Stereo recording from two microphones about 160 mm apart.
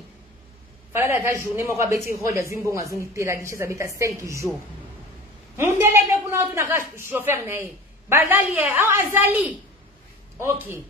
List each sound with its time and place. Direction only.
0.9 s a woman's voice: 15° right (ahead or behind)
5.6 s a woman's voice: 15° right (ahead or behind)